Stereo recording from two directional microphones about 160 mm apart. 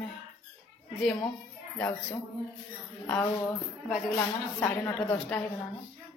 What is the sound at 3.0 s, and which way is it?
A woman's voice, 15° left (ahead or behind).